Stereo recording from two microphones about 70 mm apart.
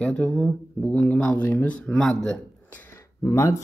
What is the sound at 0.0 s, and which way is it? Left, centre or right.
Speech, centre.